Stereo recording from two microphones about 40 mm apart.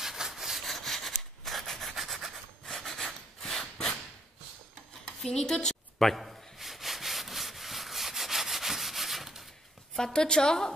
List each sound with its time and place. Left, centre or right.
0.0 s sawing: centre
0.7 s rub: centre
2.6 s sawing: centre
5.0 s a sound: centre
9.9 s a woman's voice: centre